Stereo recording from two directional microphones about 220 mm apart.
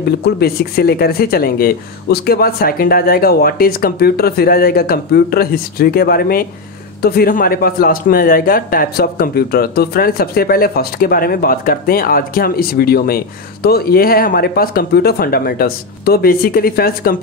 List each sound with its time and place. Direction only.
0.2 s speech: 45° left (ahead or behind)